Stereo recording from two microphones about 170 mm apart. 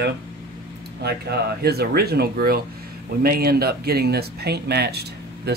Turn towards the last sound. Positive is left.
turn(degrees=-75)  # may be behind; listen again after turning